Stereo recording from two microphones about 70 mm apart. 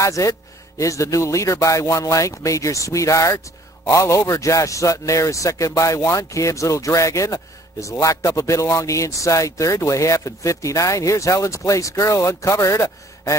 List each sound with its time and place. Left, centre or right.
0.0 s a man's voice: left